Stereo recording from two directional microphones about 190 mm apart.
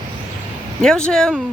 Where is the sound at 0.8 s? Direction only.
5° left (ahead or behind).